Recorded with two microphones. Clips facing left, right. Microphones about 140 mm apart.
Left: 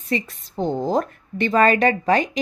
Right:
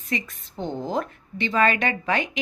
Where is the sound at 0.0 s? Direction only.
35° left (ahead or behind).